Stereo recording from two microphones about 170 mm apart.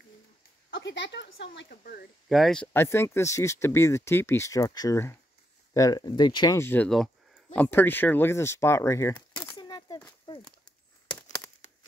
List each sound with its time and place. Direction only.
0.7 s speech: 90° left; by 2.0 s 65° left (ahead or behind)
2.2 s speech: centre (ahead or behind); by 9.5 s 15° left (ahead or behind)
9.5 s a sound: 25° left (ahead or behind)